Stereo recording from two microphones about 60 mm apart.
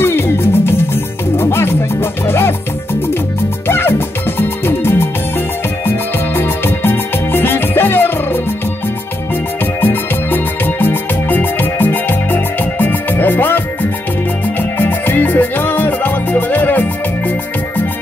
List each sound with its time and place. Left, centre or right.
0.0 s music: left
9.8 s music: left
14.6 s music: left